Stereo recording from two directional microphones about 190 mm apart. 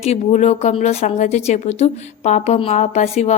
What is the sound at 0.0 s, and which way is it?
Speech, 35° left (ahead or behind).